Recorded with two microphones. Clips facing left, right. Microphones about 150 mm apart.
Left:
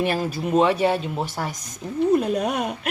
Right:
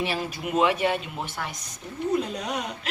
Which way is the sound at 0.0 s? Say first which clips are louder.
Left 5 dB; 45° left (ahead or behind).